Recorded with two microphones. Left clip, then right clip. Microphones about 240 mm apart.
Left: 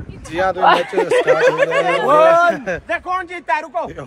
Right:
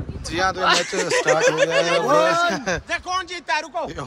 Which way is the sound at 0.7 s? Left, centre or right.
Centre.